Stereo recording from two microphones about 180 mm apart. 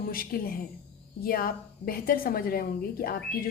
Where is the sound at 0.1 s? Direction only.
55° left (ahead or behind).